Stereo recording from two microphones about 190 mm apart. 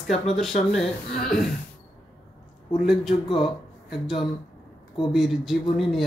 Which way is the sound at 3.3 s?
25° left (ahead or behind).